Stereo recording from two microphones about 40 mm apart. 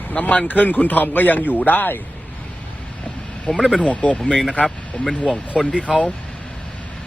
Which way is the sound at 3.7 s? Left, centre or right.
Left.